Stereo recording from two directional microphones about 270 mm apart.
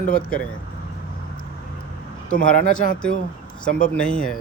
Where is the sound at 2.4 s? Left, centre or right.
Left.